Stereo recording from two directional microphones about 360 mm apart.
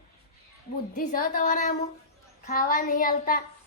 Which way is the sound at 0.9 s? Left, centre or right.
Left.